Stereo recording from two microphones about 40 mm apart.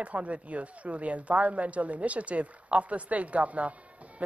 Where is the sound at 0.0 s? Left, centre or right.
Right.